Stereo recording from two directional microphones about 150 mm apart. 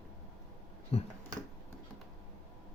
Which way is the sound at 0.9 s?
40° left (ahead or behind).